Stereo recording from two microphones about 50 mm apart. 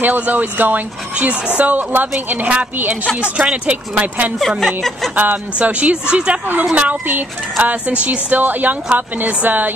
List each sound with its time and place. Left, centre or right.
0.0 s speech: right
3.2 s speech: right
4.4 s speech: centre
5.1 s speech: right